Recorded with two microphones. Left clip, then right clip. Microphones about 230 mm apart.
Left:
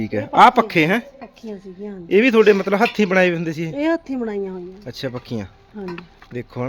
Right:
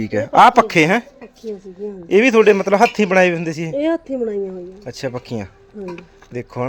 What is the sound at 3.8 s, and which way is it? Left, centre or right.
Speech, centre.